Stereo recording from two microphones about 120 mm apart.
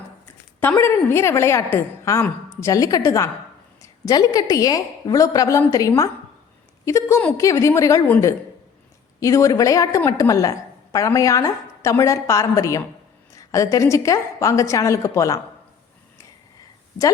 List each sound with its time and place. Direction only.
0.6 s a woman's voice: 20° left (ahead or behind)
9.2 s a woman's voice: 25° left (ahead or behind)